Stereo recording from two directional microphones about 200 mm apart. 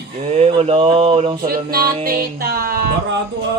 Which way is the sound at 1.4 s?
50° right (ahead or behind).